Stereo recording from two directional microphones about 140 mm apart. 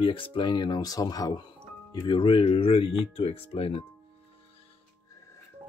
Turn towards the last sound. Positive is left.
turn(degrees=45)  # may be behind; listen again after turning